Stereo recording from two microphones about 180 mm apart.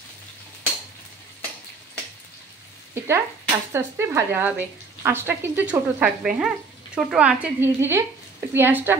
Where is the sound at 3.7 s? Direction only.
15° right (ahead or behind).